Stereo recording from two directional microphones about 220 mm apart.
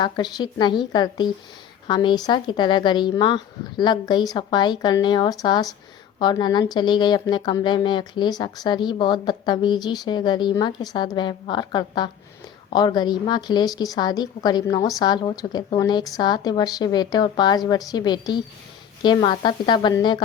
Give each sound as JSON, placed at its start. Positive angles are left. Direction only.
{"t": 0.0, "sound": "speech", "side_deg": 20}